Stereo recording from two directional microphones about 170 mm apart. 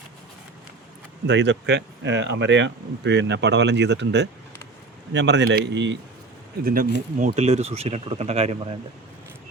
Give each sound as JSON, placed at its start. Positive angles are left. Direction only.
{"t": 1.3, "sound": "speech", "side_deg": -90}
{"t": 6.7, "sound": "speech", "side_deg": -55}